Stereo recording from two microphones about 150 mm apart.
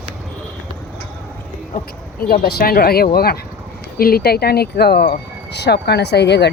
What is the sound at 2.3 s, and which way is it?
Speech, 90° left.